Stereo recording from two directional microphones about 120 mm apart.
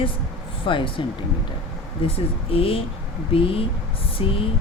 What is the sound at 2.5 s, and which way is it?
Speech, 50° left (ahead or behind).